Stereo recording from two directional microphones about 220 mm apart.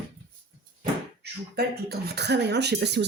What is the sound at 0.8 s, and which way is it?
Speech, 45° right (ahead or behind).